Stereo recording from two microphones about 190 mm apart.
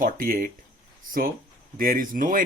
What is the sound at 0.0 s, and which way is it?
Speech, 45° right (ahead or behind).